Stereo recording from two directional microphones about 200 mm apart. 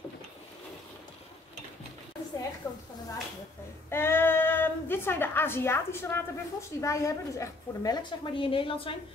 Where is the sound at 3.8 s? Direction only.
10° left (ahead or behind).